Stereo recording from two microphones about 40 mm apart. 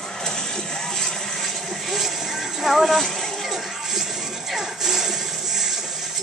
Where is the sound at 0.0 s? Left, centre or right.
Centre.